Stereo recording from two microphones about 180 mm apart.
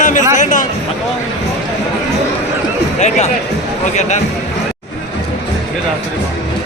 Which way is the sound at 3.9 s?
40° left (ahead or behind).